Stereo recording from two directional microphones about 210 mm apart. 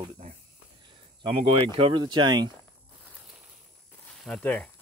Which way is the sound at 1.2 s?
25° right (ahead or behind).